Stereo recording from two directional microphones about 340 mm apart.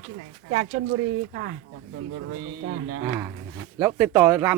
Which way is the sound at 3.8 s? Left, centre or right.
Centre.